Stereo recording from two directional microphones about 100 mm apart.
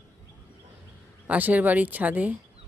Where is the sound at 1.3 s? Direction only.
15° right (ahead or behind).